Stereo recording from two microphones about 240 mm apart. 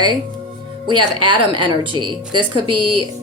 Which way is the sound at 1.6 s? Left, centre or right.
Centre.